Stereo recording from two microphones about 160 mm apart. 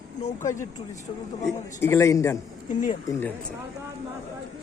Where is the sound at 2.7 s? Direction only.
55° left (ahead or behind).